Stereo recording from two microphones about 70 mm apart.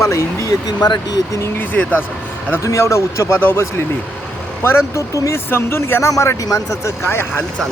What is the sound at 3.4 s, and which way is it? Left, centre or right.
Speech, left.